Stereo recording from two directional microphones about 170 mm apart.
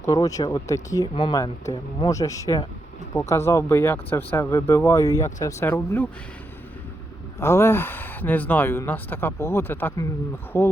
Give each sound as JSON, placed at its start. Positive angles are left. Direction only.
{"t": 0.0, "sound": "speech", "side_deg": 20}
{"t": 7.3, "sound": "speech", "side_deg": 15}